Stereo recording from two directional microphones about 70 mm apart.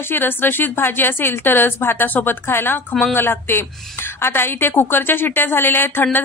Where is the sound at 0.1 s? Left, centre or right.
Left.